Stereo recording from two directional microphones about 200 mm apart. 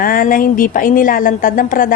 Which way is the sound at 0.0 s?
45° left (ahead or behind).